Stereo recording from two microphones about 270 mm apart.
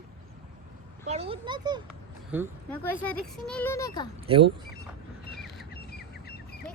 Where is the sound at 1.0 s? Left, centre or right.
Right.